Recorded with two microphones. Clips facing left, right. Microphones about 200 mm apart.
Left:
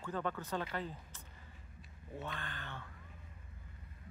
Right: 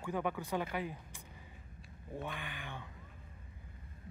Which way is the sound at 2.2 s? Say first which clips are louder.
Even; 15° right (ahead or behind).